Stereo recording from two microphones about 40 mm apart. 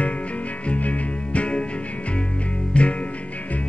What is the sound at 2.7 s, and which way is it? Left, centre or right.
Music, left.